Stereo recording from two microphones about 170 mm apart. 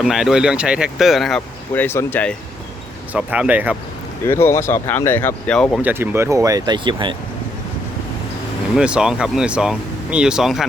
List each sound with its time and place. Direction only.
0.0 s speech: centre (ahead or behind)
1.7 s speech: 10° left (ahead or behind)
3.1 s speech: 10° right (ahead or behind)
4.3 s speech: 15° left (ahead or behind)
5.8 s speech: 15° right (ahead or behind); by 7.2 s 30° right (ahead or behind)
8.7 s speech: 5° right (ahead or behind)